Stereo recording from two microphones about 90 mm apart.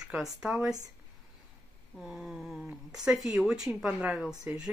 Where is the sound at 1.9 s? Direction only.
5° right (ahead or behind).